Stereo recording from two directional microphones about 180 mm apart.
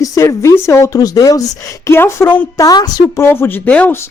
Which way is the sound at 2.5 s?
20° left (ahead or behind).